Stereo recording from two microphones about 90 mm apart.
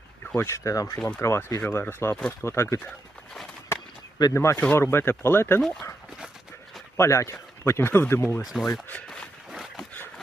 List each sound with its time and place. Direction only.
0.3 s speech: 30° left (ahead or behind)
4.4 s speech: 30° left (ahead or behind)
6.9 s speech: 30° left (ahead or behind)
8.4 s speech: centre (ahead or behind)
9.0 s a sound: 10° left (ahead or behind)